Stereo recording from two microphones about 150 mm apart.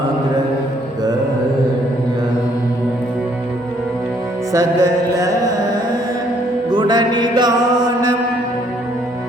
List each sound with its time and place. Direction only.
4.5 s music: 20° right (ahead or behind)
6.7 s music: 30° right (ahead or behind)